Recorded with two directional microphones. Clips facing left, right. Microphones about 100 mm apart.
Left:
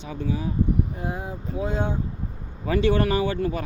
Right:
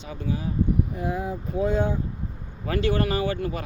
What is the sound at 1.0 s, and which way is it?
Speech, 25° left (ahead or behind).